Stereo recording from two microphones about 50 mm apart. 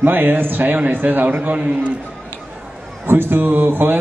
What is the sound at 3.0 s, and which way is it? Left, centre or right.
Speech, right.